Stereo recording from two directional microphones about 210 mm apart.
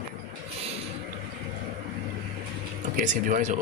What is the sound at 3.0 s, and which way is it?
Speech, 35° right (ahead or behind).